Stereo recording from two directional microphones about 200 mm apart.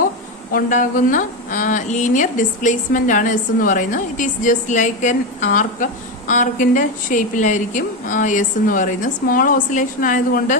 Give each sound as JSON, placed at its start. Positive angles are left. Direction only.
{"t": 0.5, "sound": "a woman's voice", "side_deg": 40}